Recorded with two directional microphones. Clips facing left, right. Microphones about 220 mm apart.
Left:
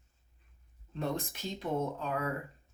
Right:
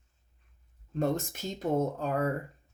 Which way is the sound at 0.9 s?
45° right (ahead or behind).